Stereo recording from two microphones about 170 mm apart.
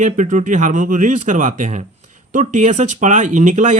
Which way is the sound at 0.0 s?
45° right (ahead or behind).